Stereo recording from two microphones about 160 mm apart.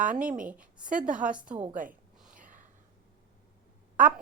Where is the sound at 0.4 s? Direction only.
10° right (ahead or behind).